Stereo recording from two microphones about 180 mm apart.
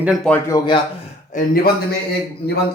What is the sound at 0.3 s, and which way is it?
Speech, 15° left (ahead or behind).